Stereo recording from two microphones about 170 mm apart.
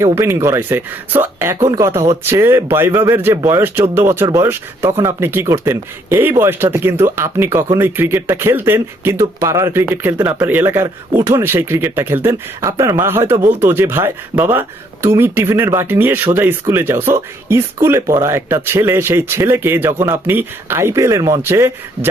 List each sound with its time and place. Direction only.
0.0 s speech: 15° right (ahead or behind)